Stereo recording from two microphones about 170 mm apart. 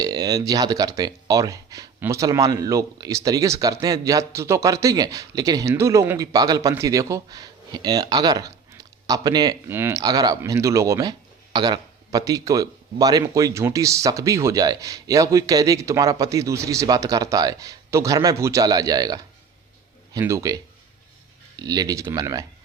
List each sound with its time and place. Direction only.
0.0 s speech: 20° right (ahead or behind)